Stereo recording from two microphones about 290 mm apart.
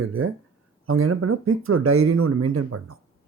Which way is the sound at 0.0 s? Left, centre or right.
Right.